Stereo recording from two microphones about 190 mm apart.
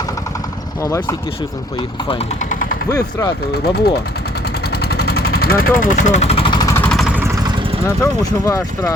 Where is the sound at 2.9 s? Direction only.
20° left (ahead or behind).